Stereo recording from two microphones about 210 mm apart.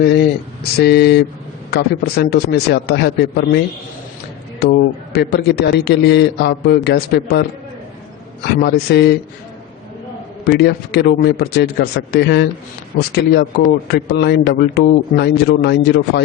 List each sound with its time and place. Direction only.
0.0 s a man's voice: 50° left (ahead or behind)
4.6 s a man's voice: 50° left (ahead or behind)
8.4 s a man's voice: 55° left (ahead or behind)
10.4 s a man's voice: 50° left (ahead or behind)